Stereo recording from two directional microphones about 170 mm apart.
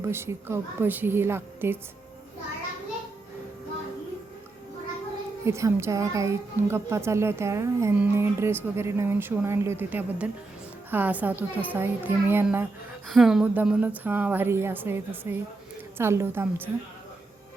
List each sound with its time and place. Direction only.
0.0 s a woman's voice: 15° right (ahead or behind)
5.5 s a woman's voice: 15° right (ahead or behind)
13.1 s a woman's voice: centre (ahead or behind)